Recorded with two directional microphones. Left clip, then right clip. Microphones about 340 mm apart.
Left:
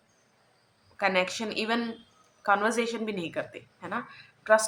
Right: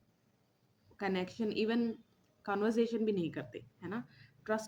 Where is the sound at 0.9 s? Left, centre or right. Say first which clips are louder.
Left 11 dB; right.